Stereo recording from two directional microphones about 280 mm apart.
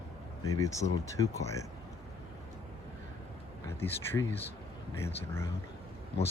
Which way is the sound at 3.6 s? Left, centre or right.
Centre.